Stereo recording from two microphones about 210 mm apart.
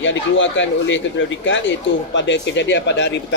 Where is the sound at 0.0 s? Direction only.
65° left (ahead or behind).